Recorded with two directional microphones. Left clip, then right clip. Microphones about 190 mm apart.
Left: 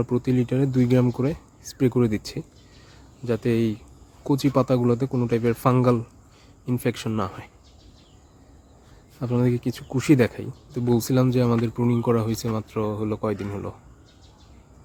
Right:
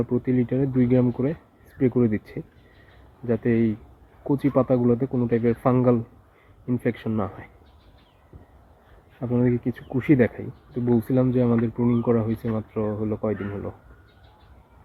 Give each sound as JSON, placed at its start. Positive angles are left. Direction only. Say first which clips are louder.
{"t": 0.0, "sound": "speech", "louder": "even", "side_deg": 30}
{"t": 9.2, "sound": "speech", "louder": "right 1 dB", "side_deg": 25}